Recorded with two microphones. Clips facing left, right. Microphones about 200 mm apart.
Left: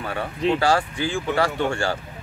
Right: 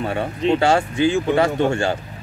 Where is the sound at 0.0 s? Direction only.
25° right (ahead or behind).